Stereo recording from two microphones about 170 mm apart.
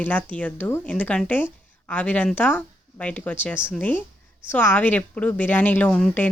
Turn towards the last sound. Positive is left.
turn(degrees=5)  # may be behind; listen again after turning